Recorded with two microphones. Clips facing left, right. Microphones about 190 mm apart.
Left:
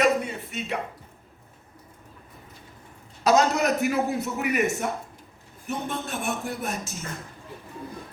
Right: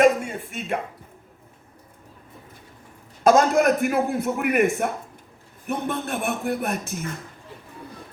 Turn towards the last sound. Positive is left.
turn(degrees=-60)  # may be behind; listen again after turning